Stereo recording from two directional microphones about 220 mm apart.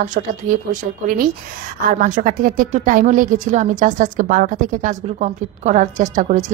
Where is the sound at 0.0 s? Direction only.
35° right (ahead or behind).